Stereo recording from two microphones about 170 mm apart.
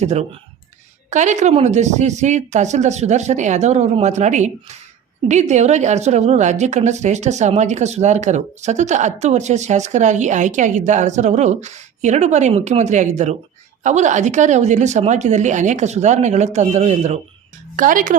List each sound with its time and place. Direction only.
0.0 s speech: 40° right (ahead or behind)
17.7 s speech: 50° right (ahead or behind)